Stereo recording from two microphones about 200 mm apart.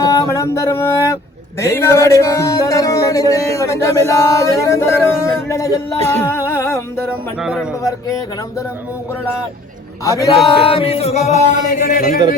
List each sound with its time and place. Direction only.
0.1 s speech: 15° left (ahead or behind)
6.1 s music: 15° left (ahead or behind)
7.4 s a man's voice: 5° right (ahead or behind)
7.8 s speech: 15° left (ahead or behind)
10.0 s speech: 15° left (ahead or behind)
10.3 s a sound: 25° left (ahead or behind); by 12.2 s 45° left (ahead or behind)